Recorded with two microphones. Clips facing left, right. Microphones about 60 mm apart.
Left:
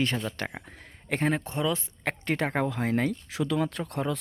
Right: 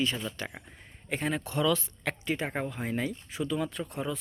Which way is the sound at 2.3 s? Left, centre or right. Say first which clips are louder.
Left 6 dB; left.